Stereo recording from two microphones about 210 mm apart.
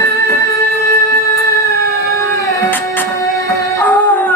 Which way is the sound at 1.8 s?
50° right (ahead or behind).